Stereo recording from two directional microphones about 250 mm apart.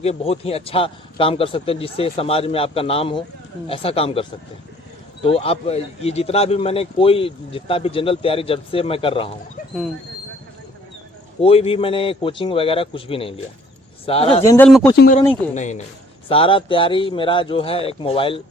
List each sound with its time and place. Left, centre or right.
0.0 s speech: left
11.3 s speech: left
14.4 s speech: centre
14.9 s speech: left